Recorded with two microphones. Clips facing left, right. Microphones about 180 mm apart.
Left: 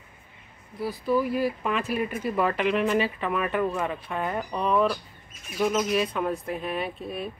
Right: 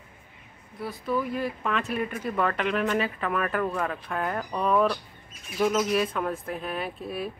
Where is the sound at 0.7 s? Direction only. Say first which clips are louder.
Left 4 dB; centre (ahead or behind).